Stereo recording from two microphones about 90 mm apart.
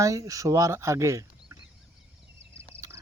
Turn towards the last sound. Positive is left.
turn(degrees=-40)  # may be behind; listen again after turning